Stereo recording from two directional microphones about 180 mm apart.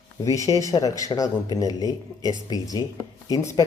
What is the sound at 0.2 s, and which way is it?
Speech, 15° left (ahead or behind).